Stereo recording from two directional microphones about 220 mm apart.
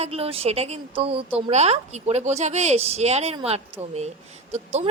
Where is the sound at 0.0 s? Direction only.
25° right (ahead or behind).